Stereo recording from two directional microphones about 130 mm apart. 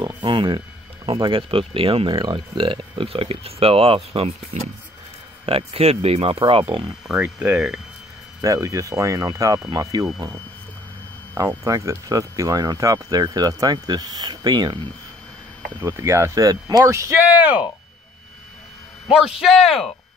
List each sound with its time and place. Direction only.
0.0 s speech: 35° right (ahead or behind)
5.4 s speech: 45° right (ahead or behind)
7.2 s speech: 15° right (ahead or behind)
8.4 s speech: 25° right (ahead or behind)
15.8 s speech: 25° right (ahead or behind)
17.4 s speech: 10° right (ahead or behind)
19.0 s speech: 5° right (ahead or behind)